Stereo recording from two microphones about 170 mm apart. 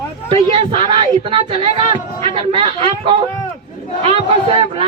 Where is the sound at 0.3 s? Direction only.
35° right (ahead or behind).